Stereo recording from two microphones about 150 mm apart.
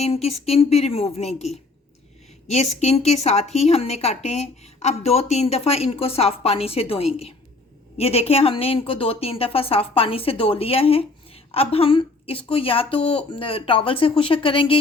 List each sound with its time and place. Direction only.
0.0 s a woman's voice: 45° left (ahead or behind)